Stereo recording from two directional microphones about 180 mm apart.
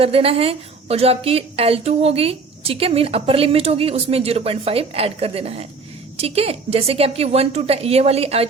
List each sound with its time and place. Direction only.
0.0 s a woman's voice: 30° right (ahead or behind)